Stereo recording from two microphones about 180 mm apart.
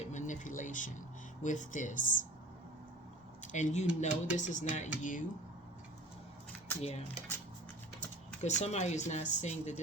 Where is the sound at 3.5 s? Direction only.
40° left (ahead or behind).